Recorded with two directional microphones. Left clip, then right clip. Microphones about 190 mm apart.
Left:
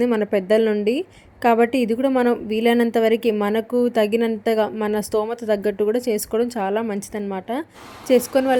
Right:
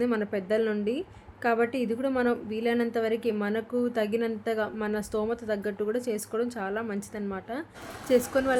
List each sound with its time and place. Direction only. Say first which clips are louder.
0.0 s a woman's voice: left 9 dB; 30° left (ahead or behind)